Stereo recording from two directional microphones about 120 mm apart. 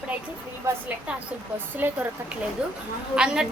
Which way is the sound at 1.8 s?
15° right (ahead or behind).